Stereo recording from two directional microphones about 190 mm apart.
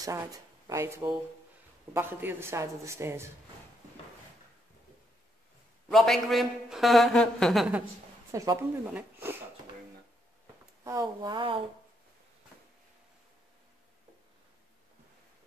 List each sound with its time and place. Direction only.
0.0 s a woman's voice: 15° right (ahead or behind)
5.9 s a man's voice: centre (ahead or behind)
8.3 s a woman's voice: 15° right (ahead or behind)
10.8 s speech: 15° right (ahead or behind)